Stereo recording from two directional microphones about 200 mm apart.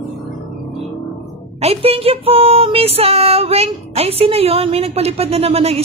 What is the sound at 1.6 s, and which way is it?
Music, 30° right (ahead or behind).